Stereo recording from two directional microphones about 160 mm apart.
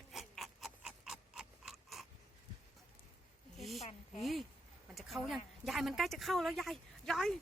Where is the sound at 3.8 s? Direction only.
40° left (ahead or behind).